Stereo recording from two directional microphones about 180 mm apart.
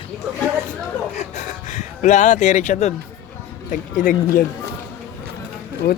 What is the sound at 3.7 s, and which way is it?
Speech, 45° left (ahead or behind).